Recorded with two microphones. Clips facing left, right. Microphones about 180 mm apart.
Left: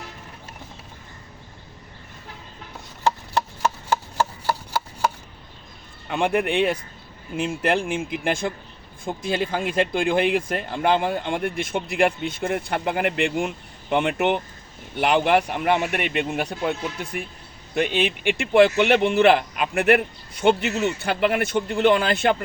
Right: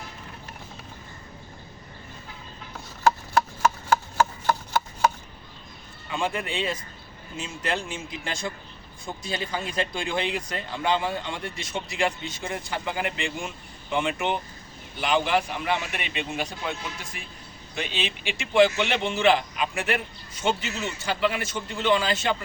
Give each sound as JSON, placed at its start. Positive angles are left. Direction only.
{"t": 6.1, "sound": "speech", "side_deg": 65}